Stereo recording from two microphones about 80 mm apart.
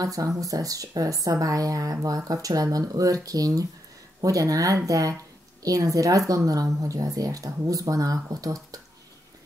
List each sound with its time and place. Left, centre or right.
0.0 s speech: right